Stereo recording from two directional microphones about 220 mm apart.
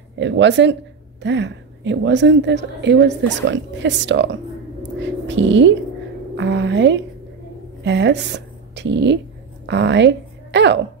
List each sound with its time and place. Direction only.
0.2 s a woman's voice: 55° right (ahead or behind)
4.8 s a sound: 55° right (ahead or behind)
6.3 s a woman's voice: 55° right (ahead or behind)